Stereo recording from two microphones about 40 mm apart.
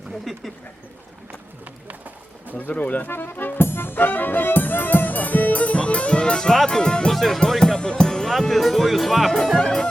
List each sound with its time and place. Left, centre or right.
0.3 s speech: centre
1.9 s music: right
2.6 s speech: left
3.1 s music: left; by 6.6 s centre
6.7 s speech: centre
7.1 s music: centre
9.4 s speech: centre
9.6 s music: left